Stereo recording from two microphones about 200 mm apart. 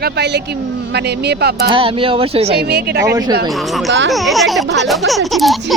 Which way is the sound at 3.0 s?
20° right (ahead or behind).